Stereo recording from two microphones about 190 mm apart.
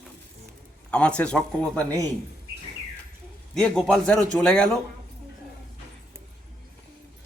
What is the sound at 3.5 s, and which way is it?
A man's voice, 5° left (ahead or behind).